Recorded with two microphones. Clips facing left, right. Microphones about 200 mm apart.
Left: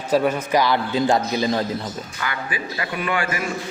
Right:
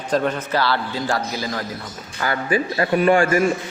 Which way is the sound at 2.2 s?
40° right (ahead or behind).